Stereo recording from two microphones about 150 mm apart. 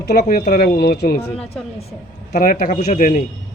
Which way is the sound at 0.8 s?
90° left.